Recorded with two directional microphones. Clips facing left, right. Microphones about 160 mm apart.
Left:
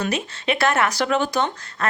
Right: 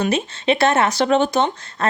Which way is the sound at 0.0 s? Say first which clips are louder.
Right 5 dB; 25° right (ahead or behind).